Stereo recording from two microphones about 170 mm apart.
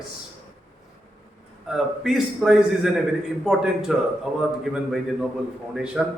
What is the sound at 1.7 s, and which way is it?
A man's voice, centre (ahead or behind).